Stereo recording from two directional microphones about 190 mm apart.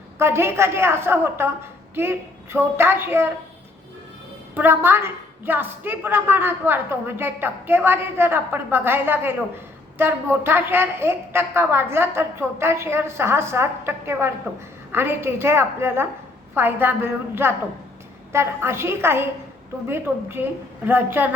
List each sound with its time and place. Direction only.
0.2 s a woman's voice: 15° right (ahead or behind)
4.5 s a woman's voice: 10° right (ahead or behind)